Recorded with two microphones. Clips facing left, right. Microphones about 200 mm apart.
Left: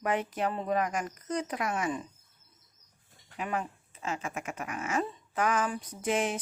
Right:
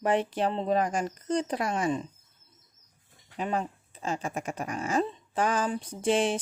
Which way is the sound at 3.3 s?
30° right (ahead or behind).